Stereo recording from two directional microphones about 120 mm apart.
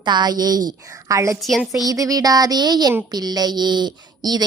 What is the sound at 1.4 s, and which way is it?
Speech, centre (ahead or behind).